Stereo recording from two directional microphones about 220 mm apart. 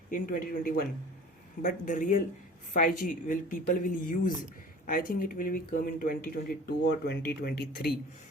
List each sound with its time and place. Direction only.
0.1 s speech: 40° left (ahead or behind)